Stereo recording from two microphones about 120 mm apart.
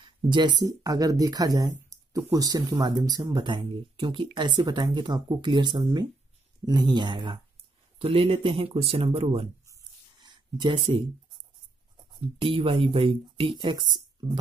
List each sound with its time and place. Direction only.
0.0 s speech: 40° right (ahead or behind)
8.0 s speech: 50° right (ahead or behind)
9.7 s a sound: 35° right (ahead or behind)
12.1 s speech: 50° right (ahead or behind)